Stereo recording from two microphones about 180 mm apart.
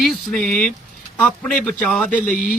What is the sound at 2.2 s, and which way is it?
Mantra, 50° left (ahead or behind).